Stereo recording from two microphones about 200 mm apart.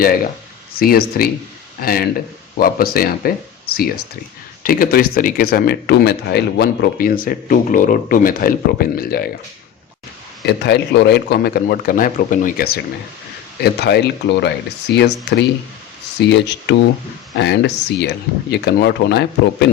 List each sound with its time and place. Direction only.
0.8 s speech: 50° left (ahead or behind)
10.4 s speech: 60° left (ahead or behind)